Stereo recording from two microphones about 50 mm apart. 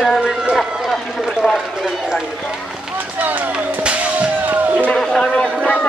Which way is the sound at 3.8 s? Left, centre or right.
Right.